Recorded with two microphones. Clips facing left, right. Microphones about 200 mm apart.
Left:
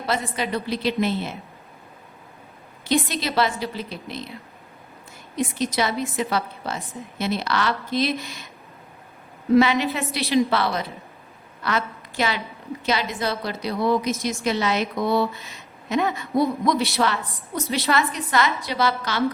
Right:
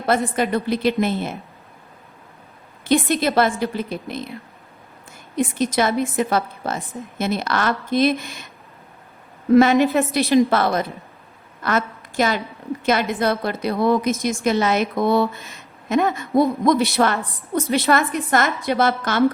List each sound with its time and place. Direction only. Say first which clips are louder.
0.3 s a woman's voice: right 5 dB; 50° right (ahead or behind)
3.1 s a woman's voice: right 5 dB; 50° right (ahead or behind)
5.5 s a woman's voice: right 5 dB; 50° right (ahead or behind)
9.6 s a woman's voice: right 5 dB; 50° right (ahead or behind)